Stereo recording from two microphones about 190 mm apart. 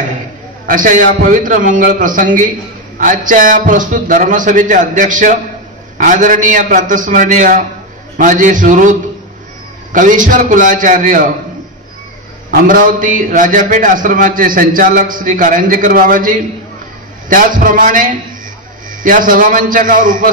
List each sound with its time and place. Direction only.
0.7 s a man's voice: 45° right (ahead or behind)
9.9 s a man's voice: 45° right (ahead or behind)
12.4 s a man's voice: 45° right (ahead or behind)